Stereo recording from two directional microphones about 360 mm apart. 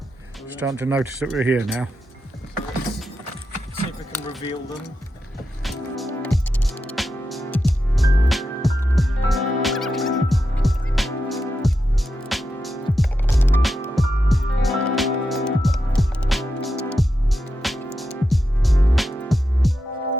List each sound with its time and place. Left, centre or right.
0.6 s speech: centre
4.1 s a sound: centre
5.6 s music: centre